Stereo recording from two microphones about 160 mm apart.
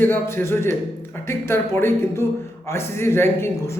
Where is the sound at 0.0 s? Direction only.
10° left (ahead or behind).